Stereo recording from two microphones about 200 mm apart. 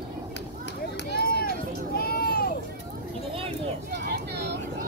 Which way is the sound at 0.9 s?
55° left (ahead or behind).